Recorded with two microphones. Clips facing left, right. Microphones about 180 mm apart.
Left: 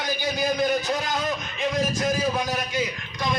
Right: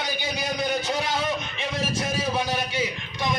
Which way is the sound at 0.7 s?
25° right (ahead or behind).